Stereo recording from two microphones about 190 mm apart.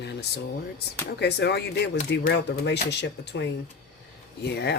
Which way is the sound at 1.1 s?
60° left (ahead or behind).